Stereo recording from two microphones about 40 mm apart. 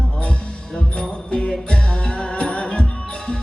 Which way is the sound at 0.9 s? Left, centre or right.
Left.